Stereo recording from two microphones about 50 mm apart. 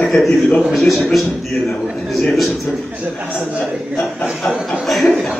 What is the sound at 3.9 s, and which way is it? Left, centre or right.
A man's voice, centre.